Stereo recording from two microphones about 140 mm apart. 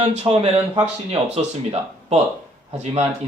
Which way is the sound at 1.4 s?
50° right (ahead or behind).